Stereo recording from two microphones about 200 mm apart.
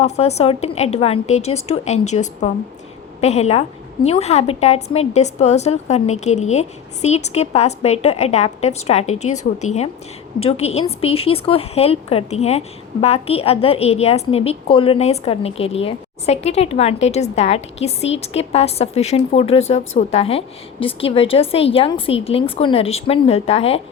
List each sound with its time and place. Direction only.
0.0 s a woman's voice: 30° left (ahead or behind)